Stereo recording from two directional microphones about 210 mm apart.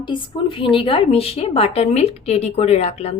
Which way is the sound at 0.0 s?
25° left (ahead or behind).